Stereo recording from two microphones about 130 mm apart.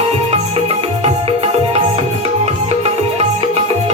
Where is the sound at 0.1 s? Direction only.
50° right (ahead or behind).